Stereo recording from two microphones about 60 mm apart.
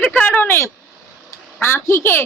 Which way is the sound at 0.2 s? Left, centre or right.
Left.